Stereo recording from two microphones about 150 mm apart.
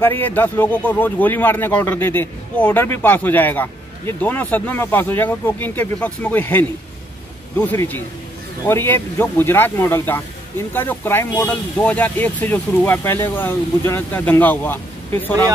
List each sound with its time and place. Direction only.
0.0 s speech: 15° left (ahead or behind)